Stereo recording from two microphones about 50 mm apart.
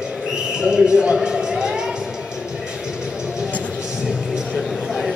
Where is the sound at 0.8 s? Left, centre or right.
Centre.